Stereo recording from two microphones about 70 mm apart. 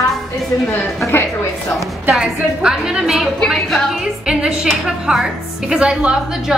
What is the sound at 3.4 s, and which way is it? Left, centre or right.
Music, centre.